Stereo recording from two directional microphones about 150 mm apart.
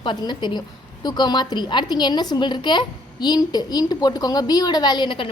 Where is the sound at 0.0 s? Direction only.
30° left (ahead or behind).